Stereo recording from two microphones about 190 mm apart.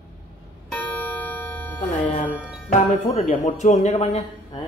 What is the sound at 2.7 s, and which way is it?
Speech, 40° left (ahead or behind).